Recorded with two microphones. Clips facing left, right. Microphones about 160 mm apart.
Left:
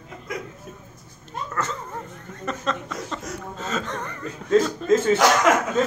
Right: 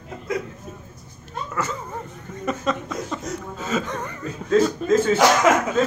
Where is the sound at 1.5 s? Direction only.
10° right (ahead or behind).